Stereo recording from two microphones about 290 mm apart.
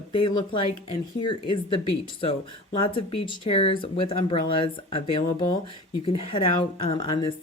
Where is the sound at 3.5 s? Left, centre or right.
Centre.